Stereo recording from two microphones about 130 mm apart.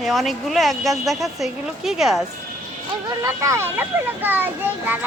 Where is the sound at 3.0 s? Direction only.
25° right (ahead or behind).